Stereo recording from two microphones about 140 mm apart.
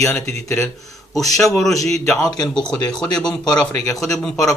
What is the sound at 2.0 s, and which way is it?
Speech, 5° left (ahead or behind).